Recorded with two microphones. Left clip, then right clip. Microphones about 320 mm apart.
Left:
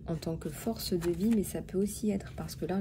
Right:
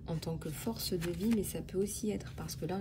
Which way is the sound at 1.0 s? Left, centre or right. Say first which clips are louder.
Left 5 dB; centre.